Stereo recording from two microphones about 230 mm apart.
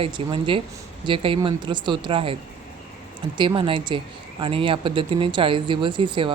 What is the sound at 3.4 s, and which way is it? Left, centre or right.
Speech, right.